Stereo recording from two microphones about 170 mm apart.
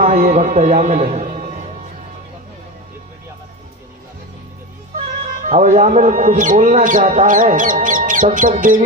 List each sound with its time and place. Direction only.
0.0 s a man's voice: 50° right (ahead or behind)
5.3 s speech: 45° right (ahead or behind)